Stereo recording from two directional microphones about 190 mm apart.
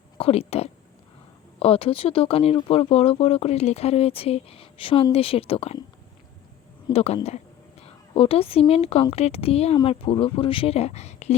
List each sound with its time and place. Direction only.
0.2 s speech: 30° left (ahead or behind)
6.8 s speech: 30° left (ahead or behind)